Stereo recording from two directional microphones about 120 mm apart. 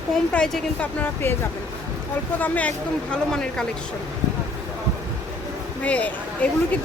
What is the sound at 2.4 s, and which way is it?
A woman's voice, 10° left (ahead or behind).